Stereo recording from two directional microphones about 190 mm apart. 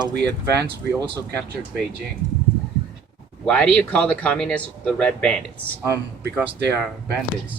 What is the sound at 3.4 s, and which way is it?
Speech, 5° left (ahead or behind).